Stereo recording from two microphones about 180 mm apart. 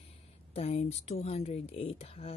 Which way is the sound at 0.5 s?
35° left (ahead or behind).